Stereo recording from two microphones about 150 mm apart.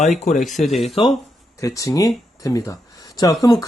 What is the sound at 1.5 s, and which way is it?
Speech, 20° left (ahead or behind).